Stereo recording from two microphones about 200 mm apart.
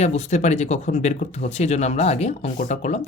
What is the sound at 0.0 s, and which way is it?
Speech, 35° left (ahead or behind).